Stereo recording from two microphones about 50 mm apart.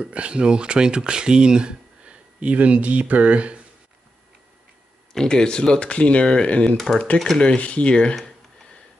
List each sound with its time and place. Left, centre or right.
0.0 s speech: right
5.1 s speech: centre